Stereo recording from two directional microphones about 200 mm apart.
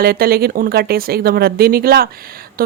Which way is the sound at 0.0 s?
50° right (ahead or behind).